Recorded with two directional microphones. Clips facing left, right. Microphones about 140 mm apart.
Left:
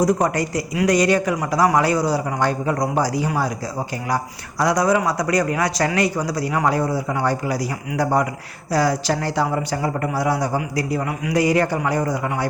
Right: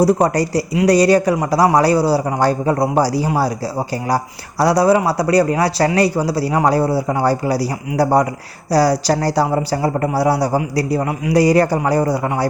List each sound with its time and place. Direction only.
0.0 s speech: 35° right (ahead or behind)